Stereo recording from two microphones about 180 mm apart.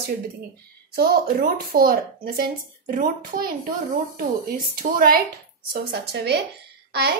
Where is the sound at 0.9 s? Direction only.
60° right (ahead or behind).